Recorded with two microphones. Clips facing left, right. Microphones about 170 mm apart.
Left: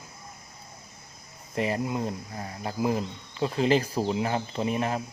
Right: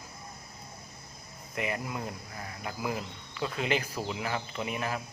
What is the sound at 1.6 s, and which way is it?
Speech, 30° left (ahead or behind).